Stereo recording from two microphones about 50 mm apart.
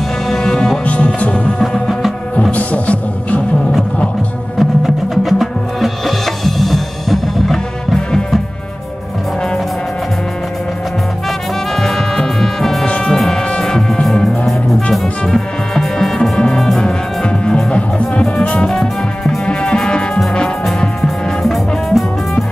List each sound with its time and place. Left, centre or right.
0.3 s music: centre
0.8 s music: left
2.5 s music: left
4.6 s music: centre
11.7 s music: centre
16.3 s music: centre
18.7 s music: centre
21.4 s music: centre